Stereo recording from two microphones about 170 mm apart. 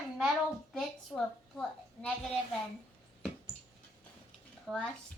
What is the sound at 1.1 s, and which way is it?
Speech, 5° left (ahead or behind).